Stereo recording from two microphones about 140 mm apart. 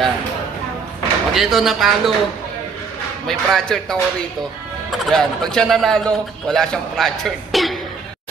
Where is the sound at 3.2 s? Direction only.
Centre (ahead or behind).